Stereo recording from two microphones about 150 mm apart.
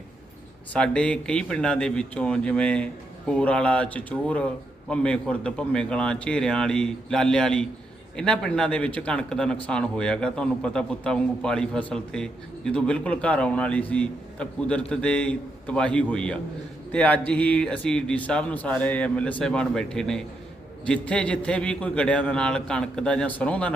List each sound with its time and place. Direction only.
0.7 s a man's voice: 5° left (ahead or behind)